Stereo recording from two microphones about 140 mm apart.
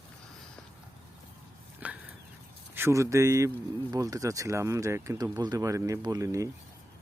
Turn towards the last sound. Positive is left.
turn(degrees=-25)  # may be behind; listen again after turning